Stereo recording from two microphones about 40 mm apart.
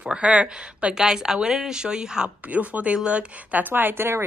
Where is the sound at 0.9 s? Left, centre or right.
Centre.